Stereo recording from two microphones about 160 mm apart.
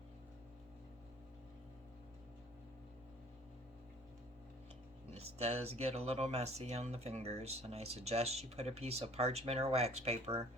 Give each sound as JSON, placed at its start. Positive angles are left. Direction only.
{"t": 5.1, "sound": "speech", "side_deg": -40}